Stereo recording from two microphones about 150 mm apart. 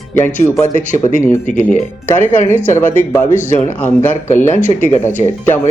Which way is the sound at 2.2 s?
45° right (ahead or behind).